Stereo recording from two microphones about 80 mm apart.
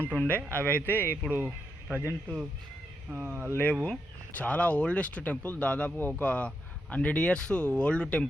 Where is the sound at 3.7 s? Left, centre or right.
Centre.